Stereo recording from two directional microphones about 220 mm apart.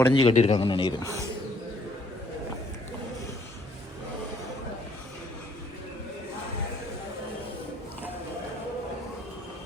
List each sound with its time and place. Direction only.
0.1 s a man's voice: 25° left (ahead or behind)